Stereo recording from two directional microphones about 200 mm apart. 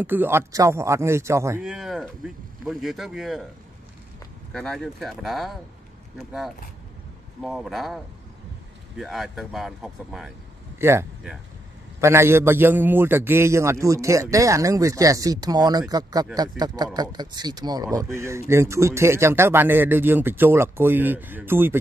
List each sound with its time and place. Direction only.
0.0 s speech: 10° right (ahead or behind)
4.5 s speech: centre (ahead or behind)
10.8 s speech: 10° right (ahead or behind)